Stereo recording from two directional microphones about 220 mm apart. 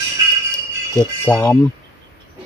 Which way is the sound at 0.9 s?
10° left (ahead or behind).